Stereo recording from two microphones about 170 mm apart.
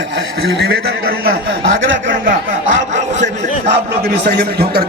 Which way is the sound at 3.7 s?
80° right.